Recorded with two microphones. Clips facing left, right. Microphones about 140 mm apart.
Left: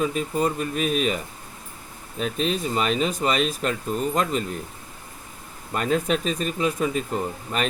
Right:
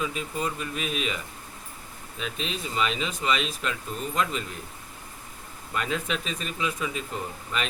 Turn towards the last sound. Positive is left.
turn(degrees=45)  # may be behind; listen again after turning